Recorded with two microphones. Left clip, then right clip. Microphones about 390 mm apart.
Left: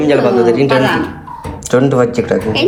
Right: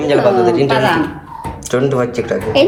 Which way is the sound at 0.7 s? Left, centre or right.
Right.